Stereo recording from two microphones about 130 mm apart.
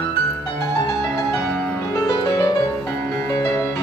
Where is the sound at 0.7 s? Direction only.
25° left (ahead or behind).